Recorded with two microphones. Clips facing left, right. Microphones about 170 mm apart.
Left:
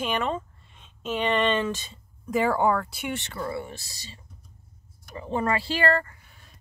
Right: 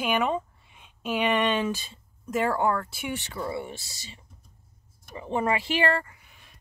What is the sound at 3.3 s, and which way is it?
Speech, 15° right (ahead or behind).